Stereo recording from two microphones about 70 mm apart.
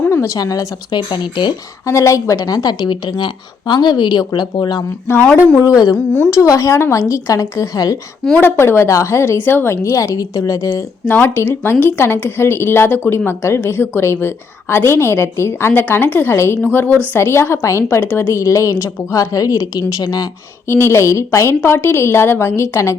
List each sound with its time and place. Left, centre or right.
0.3 s speech: left
1.9 s a woman's voice: left
5.6 s a woman's voice: left
6.3 s speech: left
8.2 s a woman's voice: centre
8.5 s speech: left
9.4 s speech: left
11.0 s speech: left
16.6 s a woman's voice: left
17.2 s speech: left
17.9 s speech: left
18.4 s a woman's voice: left
20.7 s speech: left